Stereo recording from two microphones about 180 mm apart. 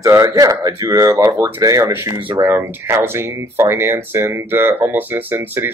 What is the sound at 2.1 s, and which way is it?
Speech, 25° right (ahead or behind).